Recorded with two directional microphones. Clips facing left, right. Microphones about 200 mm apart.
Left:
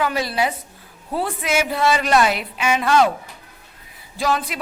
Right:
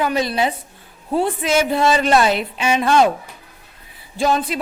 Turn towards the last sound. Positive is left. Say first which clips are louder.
# right 4 dB
turn(degrees=-25)  # may be behind; listen again after turning